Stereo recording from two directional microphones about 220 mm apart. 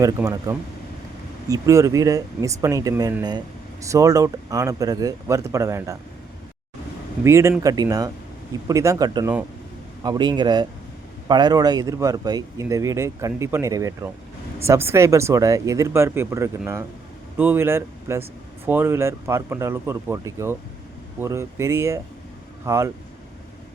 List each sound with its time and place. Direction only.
0.0 s speech: 15° right (ahead or behind)
7.3 s a man's voice: 10° right (ahead or behind)